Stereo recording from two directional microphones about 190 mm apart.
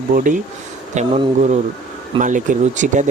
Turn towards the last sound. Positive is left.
turn(degrees=-40)  # may be behind; listen again after turning